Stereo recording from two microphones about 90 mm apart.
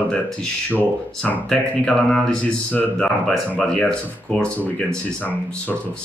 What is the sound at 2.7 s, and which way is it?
Speech, 15° left (ahead or behind).